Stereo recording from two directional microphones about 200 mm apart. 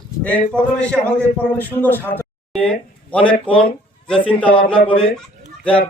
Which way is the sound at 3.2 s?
25° left (ahead or behind).